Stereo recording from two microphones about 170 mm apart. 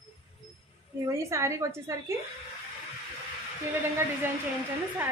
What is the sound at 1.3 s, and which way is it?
Speech, 15° right (ahead or behind).